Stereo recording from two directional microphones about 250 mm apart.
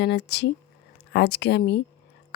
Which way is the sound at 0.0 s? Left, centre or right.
Left.